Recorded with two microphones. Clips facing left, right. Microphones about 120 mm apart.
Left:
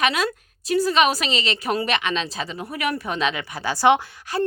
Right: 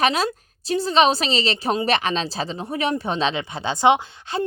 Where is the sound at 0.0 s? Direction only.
30° right (ahead or behind).